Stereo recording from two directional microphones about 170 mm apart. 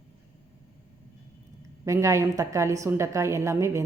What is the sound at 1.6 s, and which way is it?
A woman's voice, 20° right (ahead or behind).